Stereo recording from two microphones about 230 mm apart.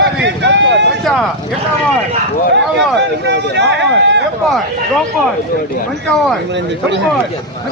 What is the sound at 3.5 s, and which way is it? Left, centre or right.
Speech, right.